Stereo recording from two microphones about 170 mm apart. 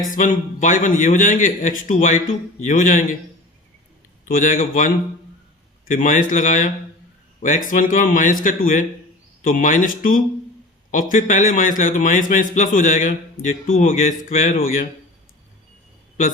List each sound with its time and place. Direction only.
0.1 s a man's voice: 50° left (ahead or behind)
4.3 s a man's voice: 50° left (ahead or behind)
5.9 s a man's voice: 50° left (ahead or behind)